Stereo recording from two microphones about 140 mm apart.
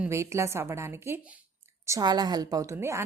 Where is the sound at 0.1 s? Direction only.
20° right (ahead or behind).